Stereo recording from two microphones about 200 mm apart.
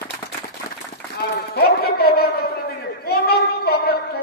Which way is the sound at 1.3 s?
50° left (ahead or behind).